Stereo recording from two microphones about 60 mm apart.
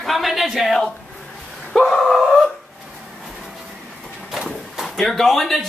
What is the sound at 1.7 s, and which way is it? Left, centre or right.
Dog, centre.